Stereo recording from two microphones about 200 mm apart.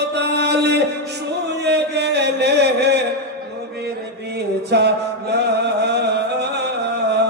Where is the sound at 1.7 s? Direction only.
55° right (ahead or behind).